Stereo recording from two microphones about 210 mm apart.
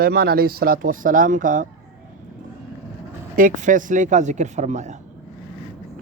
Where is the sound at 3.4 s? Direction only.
40° right (ahead or behind).